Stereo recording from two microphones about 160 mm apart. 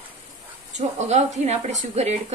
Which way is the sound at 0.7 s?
45° right (ahead or behind).